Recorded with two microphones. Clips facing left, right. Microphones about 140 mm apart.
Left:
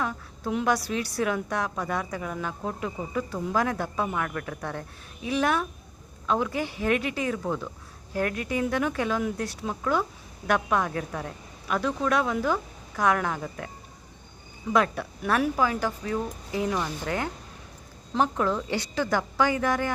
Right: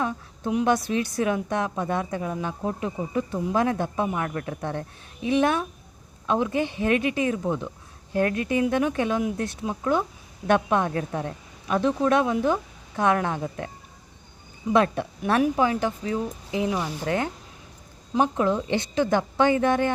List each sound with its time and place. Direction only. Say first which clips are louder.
0.0 s a woman's voice: right 3 dB; 20° right (ahead or behind)
14.7 s a woman's voice: right 3 dB; 25° right (ahead or behind)
18.1 s a woman's voice: right 3 dB; 20° right (ahead or behind)